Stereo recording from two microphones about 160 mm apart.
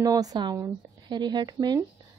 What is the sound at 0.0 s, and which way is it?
A woman's voice, 25° right (ahead or behind).